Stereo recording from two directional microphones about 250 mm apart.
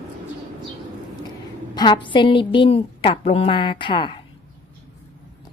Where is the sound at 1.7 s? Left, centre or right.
Centre.